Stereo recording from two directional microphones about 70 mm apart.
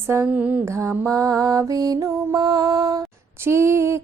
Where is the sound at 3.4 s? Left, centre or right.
Right.